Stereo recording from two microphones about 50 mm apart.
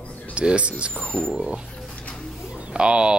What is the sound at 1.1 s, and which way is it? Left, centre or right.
Speech, left.